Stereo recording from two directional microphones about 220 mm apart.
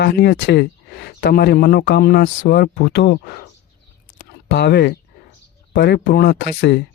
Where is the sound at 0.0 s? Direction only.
50° left (ahead or behind).